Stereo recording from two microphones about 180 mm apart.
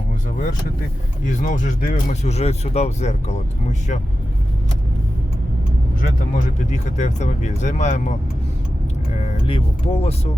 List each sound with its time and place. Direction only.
1.2 s speech: 45° left (ahead or behind)
6.0 s speech: 45° left (ahead or behind)
9.1 s speech: 35° left (ahead or behind)